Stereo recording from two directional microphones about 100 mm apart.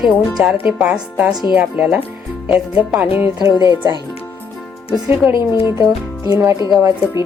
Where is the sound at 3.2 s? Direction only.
55° left (ahead or behind).